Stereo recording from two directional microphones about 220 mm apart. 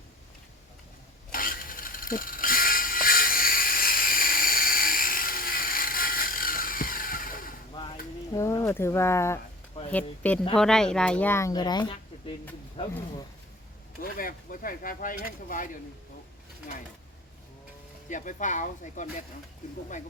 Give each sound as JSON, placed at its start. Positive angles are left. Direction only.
{"t": 1.3, "sound": "mechanisms", "side_deg": 40}
{"t": 8.3, "sound": "a sound", "side_deg": 15}
{"t": 9.9, "sound": "speech", "side_deg": 5}
{"t": 14.0, "sound": "speech", "side_deg": 40}
{"t": 18.1, "sound": "speech", "side_deg": 35}